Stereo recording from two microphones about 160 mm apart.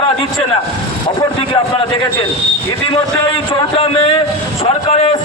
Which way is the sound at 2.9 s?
35° left (ahead or behind).